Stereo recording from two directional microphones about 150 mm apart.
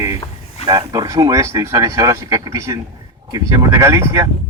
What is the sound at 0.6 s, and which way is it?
Speech, 25° right (ahead or behind).